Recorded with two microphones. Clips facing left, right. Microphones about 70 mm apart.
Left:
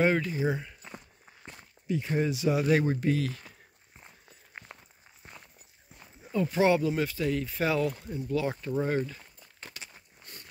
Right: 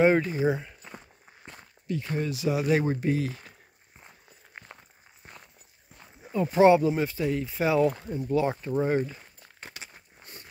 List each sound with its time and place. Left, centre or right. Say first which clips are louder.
0.0 s speech: right 4 dB; right
1.9 s speech: left 2 dB; centre
2.8 s speech: right 1 dB; right
6.3 s speech: right 5 dB; right
7.8 s speech: right 6 dB; right
8.7 s walk: right 3 dB; centre